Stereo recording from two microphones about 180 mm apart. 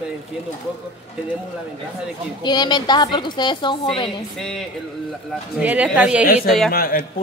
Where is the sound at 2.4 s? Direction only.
25° left (ahead or behind).